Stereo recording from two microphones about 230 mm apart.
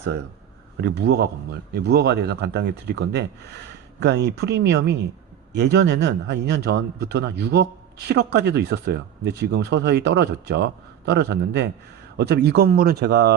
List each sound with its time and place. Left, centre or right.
0.8 s a man's voice: right